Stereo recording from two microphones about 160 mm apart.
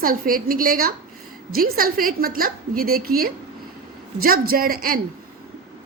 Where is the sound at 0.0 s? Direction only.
60° right (ahead or behind).